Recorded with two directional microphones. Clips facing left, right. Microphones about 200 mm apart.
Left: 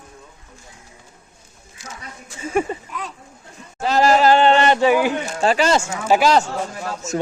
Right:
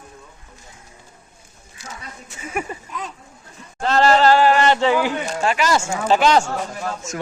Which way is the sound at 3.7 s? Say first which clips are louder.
Even; 10° left (ahead or behind).